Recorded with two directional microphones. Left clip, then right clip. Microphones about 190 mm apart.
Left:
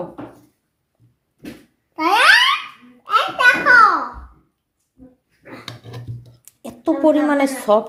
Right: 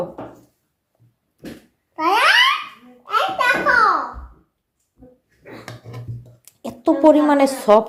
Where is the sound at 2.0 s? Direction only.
55° left (ahead or behind).